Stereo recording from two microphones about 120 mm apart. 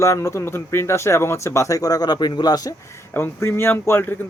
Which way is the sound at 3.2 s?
20° left (ahead or behind).